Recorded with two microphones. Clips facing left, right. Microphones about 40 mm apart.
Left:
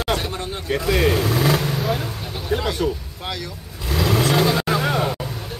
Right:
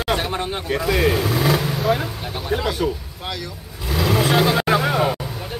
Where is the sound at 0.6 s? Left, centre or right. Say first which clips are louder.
Left 1 dB; centre.